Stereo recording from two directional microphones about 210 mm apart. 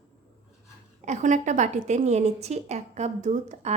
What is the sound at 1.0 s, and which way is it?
A woman's voice, 35° right (ahead or behind).